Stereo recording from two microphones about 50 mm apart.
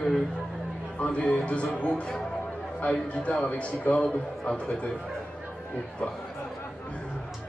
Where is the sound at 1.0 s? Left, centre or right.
Left.